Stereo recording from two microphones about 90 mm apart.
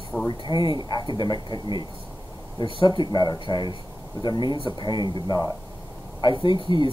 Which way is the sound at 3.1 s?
55° left (ahead or behind).